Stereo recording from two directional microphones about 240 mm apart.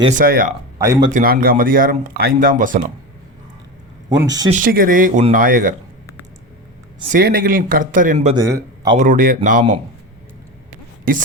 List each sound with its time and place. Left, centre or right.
0.0 s speech: right
0.8 s speech: centre
1.1 s speech: right
4.2 s speech: centre
4.5 s speech: right
7.1 s speech: right
8.4 s a man's voice: centre
9.0 s speech: right